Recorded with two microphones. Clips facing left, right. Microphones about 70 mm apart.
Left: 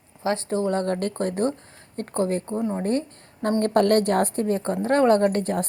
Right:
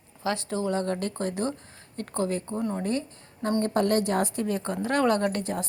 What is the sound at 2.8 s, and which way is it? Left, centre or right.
A woman's voice, left.